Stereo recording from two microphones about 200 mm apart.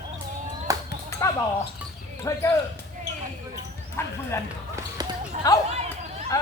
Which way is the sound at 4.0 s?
10° left (ahead or behind).